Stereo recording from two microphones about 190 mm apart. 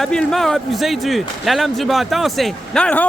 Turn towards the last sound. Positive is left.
turn(degrees=5)  # may be behind; listen again after turning